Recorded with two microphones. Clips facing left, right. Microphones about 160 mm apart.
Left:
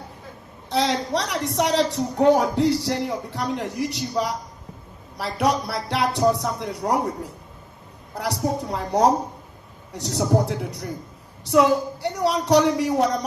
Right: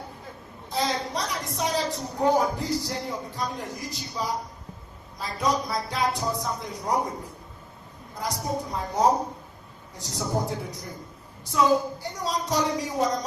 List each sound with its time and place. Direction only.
0.7 s a woman's voice: 70° left (ahead or behind)